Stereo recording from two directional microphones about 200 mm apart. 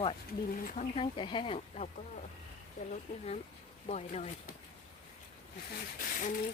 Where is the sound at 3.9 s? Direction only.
35° left (ahead or behind).